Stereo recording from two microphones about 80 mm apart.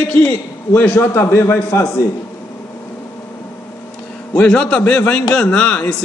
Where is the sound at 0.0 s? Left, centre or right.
Left.